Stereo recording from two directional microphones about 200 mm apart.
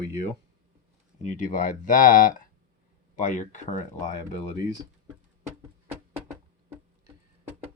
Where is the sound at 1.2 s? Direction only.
35° left (ahead or behind).